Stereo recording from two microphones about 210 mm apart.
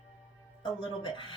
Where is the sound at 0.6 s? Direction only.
25° left (ahead or behind).